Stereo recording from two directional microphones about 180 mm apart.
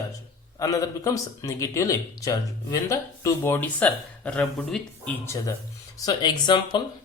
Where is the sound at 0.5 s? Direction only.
20° left (ahead or behind).